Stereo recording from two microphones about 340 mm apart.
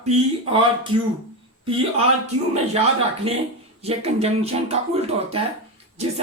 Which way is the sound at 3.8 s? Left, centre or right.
Centre.